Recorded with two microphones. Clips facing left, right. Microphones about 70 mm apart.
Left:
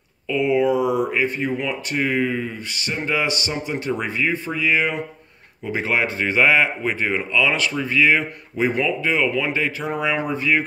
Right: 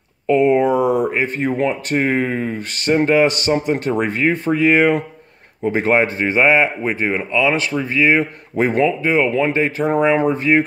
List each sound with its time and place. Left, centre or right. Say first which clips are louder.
0.3 s speech: right 5 dB; right
8.5 s speech: right 5 dB; right
9.0 s speech: right 5 dB; right